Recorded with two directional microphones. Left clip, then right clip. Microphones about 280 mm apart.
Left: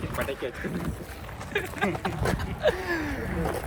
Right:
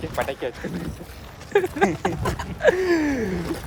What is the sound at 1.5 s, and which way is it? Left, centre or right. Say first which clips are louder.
Speech: right 8 dB; centre.